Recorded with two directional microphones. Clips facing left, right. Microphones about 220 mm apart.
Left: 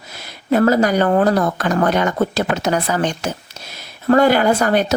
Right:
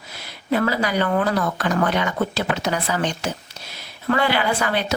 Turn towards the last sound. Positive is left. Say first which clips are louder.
# left 7 dB
turn(degrees=45)  # may be behind; listen again after turning